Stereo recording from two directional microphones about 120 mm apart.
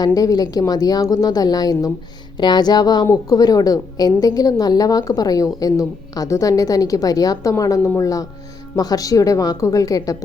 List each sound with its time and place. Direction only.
0.0 s a woman's voice: 30° left (ahead or behind)